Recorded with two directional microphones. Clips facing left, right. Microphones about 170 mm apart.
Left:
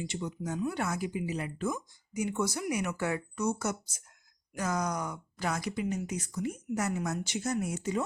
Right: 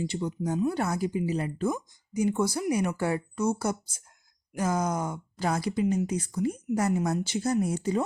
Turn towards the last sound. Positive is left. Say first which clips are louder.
# right 5 dB
turn(degrees=-30)  # may be behind; listen again after turning